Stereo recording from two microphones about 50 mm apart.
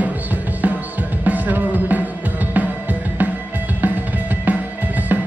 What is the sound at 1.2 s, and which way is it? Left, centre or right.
Music, right.